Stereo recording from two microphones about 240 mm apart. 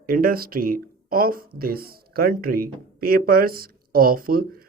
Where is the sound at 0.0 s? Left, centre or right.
Right.